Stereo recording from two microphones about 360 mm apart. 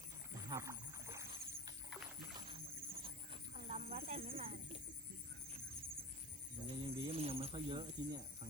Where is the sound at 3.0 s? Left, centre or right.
Centre.